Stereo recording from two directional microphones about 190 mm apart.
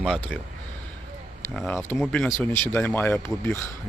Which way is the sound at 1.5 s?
5° left (ahead or behind).